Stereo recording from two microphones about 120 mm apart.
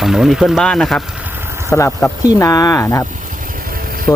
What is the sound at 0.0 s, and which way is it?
Speech, 5° right (ahead or behind).